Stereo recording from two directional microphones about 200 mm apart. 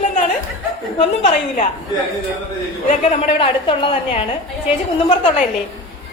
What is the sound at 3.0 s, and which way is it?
A woman's voice, 30° left (ahead or behind).